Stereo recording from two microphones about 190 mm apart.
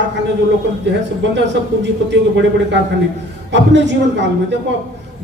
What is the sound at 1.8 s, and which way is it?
A man's voice, 70° right (ahead or behind).